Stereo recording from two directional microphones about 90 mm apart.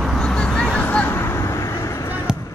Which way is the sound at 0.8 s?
20° left (ahead or behind).